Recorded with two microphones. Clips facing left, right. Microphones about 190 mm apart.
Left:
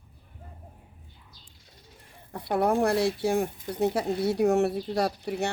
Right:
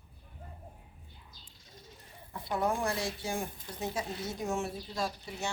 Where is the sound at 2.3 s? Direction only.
65° left (ahead or behind).